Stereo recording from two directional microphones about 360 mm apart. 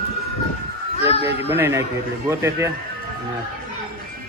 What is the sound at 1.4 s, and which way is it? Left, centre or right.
Speech, centre.